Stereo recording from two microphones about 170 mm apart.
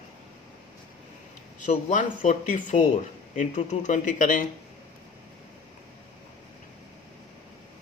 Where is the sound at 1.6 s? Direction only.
45° left (ahead or behind).